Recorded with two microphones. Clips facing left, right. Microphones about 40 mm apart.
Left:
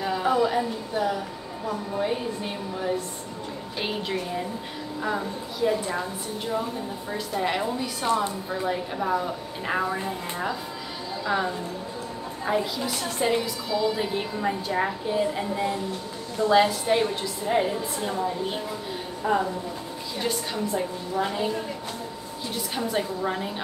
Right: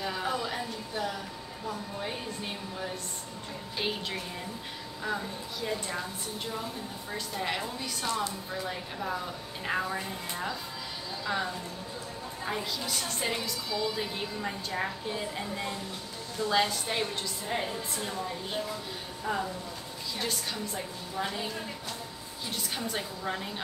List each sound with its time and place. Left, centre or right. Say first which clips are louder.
0.0 s a woman's voice: left 9 dB; centre
7.1 s a woman's voice: left 6 dB; centre
8.0 s a woman's voice: left 7 dB; left
22.8 s a woman's voice: left 8 dB; centre